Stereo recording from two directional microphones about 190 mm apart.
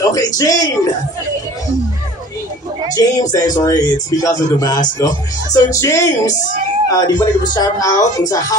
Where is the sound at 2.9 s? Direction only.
20° left (ahead or behind).